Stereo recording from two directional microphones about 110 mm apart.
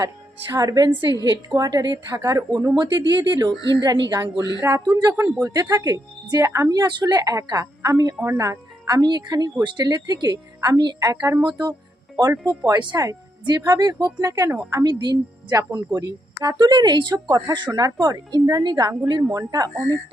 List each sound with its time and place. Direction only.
0.5 s a woman's voice: 35° right (ahead or behind)
14.8 s a woman's voice: 40° right (ahead or behind)